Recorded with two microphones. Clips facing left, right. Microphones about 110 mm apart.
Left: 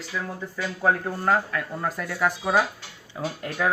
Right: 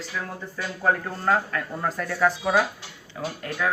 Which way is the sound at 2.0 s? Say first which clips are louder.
Right 4 dB; 15° left (ahead or behind).